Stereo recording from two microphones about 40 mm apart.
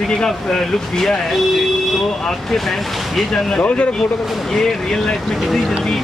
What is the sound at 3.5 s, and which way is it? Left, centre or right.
Speech, left.